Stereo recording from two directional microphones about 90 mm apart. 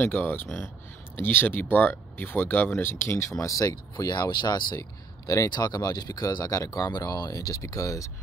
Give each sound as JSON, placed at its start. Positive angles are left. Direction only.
{"t": 0.0, "sound": "speech", "side_deg": 25}
{"t": 5.2, "sound": "speech", "side_deg": 40}